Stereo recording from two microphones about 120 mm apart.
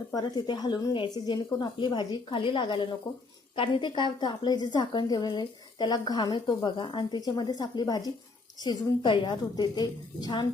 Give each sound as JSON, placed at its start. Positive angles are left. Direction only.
{"t": 0.1, "sound": "a woman's voice", "side_deg": 35}